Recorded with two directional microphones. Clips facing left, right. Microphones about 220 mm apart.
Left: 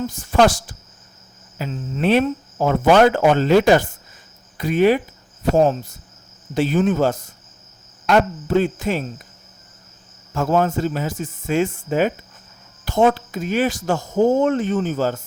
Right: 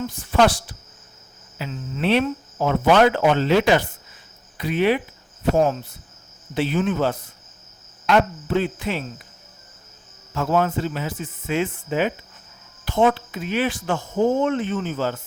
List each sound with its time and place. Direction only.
0.1 s speech: 45° left (ahead or behind)
6.5 s speech: 40° left (ahead or behind)
10.3 s speech: 40° left (ahead or behind)